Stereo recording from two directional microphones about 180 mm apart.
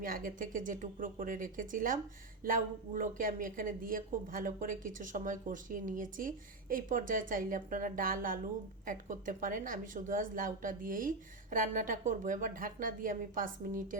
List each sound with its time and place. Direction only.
0.0 s a woman's voice: 50° right (ahead or behind)